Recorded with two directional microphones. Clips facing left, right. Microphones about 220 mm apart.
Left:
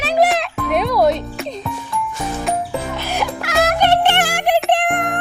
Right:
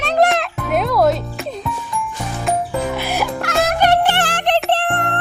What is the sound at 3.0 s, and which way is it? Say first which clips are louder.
Music: right 1 dB; 10° right (ahead or behind).